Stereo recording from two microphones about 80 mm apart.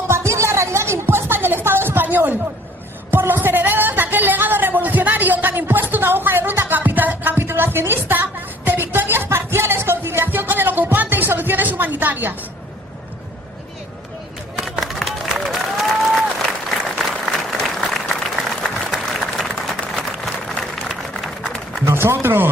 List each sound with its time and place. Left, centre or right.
0.3 s music: right
3.1 s a sound: right
8.0 s music: right
14.6 s applause: centre
21.8 s speech: right